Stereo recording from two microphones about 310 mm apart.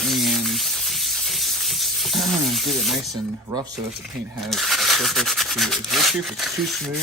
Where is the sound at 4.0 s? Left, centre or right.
Centre.